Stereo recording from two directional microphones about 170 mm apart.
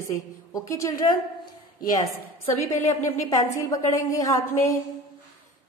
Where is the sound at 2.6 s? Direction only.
15° left (ahead or behind).